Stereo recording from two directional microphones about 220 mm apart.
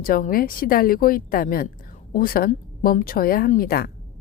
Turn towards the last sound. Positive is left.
turn(degrees=45)  # may be behind; listen again after turning